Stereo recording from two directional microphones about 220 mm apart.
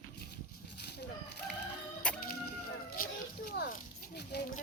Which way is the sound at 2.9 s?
40° left (ahead or behind).